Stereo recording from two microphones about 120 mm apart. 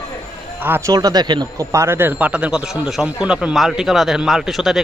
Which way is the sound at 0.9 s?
30° right (ahead or behind).